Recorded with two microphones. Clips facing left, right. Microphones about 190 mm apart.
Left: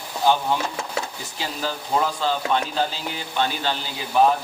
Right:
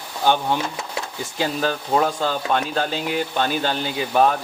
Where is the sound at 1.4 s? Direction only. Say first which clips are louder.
Right 6 dB; 60° right (ahead or behind).